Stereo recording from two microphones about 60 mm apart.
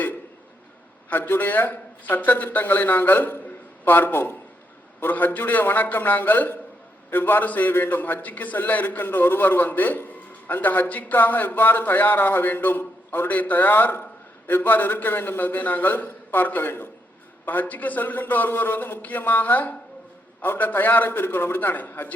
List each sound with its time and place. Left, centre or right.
1.1 s a man's voice: left